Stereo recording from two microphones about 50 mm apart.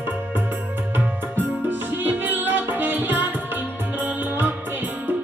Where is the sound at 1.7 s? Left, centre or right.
Right.